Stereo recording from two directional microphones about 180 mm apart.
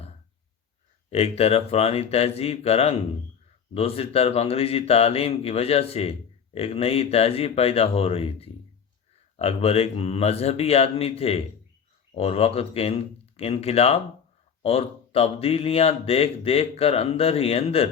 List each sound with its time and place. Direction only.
1.1 s speech: 35° left (ahead or behind)